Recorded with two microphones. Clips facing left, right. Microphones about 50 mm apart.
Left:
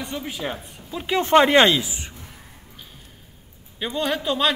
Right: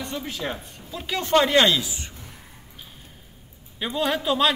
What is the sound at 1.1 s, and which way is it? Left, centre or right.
Speech, left.